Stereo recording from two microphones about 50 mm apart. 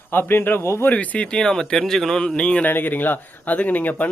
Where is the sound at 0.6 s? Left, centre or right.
Left.